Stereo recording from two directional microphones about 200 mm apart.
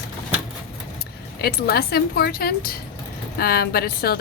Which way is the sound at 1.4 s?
50° left (ahead or behind).